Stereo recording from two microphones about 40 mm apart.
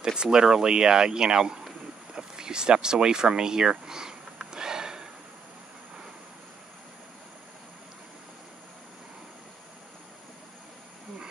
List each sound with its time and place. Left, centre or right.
0.0 s speech: centre
3.8 s sniff: centre